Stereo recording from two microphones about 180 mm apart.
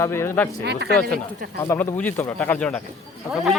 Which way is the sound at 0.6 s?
70° right (ahead or behind).